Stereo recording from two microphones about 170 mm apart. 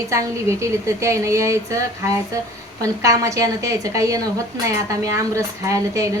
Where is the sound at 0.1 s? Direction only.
15° right (ahead or behind).